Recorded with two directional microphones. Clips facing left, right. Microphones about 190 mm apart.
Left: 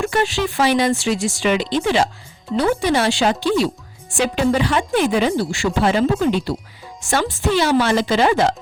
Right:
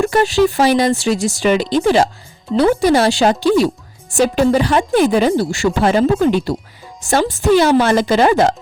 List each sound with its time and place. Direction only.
0.0 s speech: 40° right (ahead or behind)